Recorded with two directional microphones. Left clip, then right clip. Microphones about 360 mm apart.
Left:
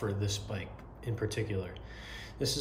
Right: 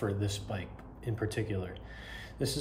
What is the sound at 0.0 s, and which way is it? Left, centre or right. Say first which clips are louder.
Speech: right 1 dB; centre.